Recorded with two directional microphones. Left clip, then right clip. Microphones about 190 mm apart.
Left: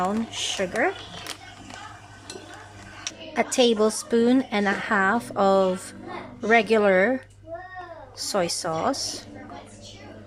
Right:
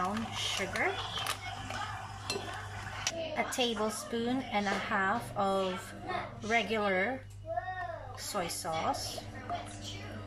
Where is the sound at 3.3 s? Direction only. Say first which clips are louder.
Left 14 dB; 60° left (ahead or behind).